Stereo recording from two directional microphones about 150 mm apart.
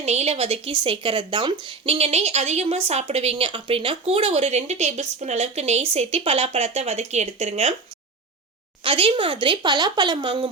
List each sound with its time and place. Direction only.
0.0 s speech: 45° right (ahead or behind)
8.8 s speech: 35° right (ahead or behind)